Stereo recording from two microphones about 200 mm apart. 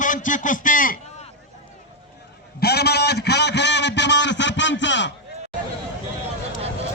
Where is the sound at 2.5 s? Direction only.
50° left (ahead or behind).